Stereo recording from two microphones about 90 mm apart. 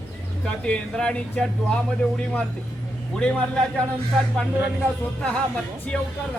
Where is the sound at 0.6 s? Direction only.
10° left (ahead or behind).